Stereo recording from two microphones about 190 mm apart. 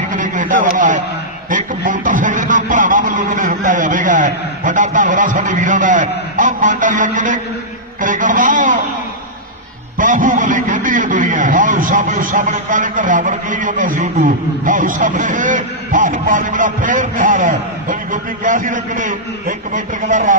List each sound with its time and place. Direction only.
0.1 s a sound: 45° right (ahead or behind)
1.5 s a man's voice: 45° right (ahead or behind)
9.9 s a man's voice: 45° right (ahead or behind)